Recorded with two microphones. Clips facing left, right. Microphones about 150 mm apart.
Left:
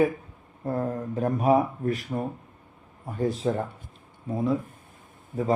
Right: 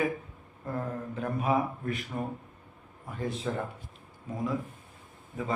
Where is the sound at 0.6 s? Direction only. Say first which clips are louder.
Left 6 dB; 35° left (ahead or behind).